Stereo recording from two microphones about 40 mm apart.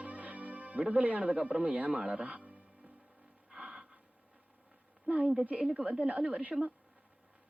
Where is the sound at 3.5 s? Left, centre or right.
Centre.